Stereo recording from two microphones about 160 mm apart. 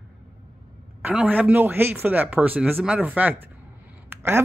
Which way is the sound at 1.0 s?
10° right (ahead or behind).